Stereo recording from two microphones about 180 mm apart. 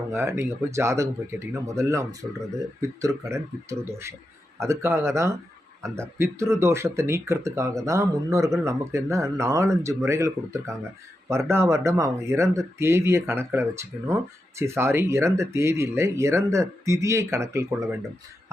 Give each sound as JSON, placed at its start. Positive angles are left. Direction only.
{"t": 0.1, "sound": "speech", "side_deg": -15}